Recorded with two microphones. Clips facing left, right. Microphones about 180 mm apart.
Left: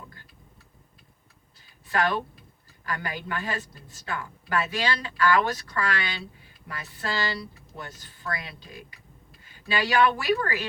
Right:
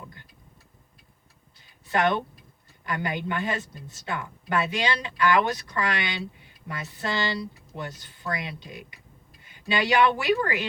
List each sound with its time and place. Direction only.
1.9 s a woman's voice: 25° right (ahead or behind)